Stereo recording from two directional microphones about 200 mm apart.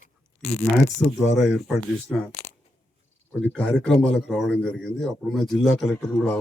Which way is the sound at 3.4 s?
5° left (ahead or behind).